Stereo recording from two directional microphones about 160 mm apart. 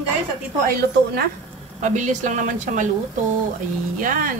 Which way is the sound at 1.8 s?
50° right (ahead or behind).